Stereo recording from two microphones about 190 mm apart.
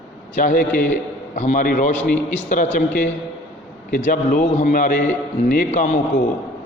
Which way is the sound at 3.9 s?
45° left (ahead or behind).